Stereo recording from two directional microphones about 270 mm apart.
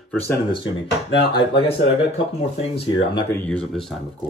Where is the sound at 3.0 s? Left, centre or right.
Centre.